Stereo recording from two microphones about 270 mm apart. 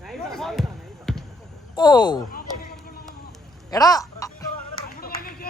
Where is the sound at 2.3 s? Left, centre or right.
Left.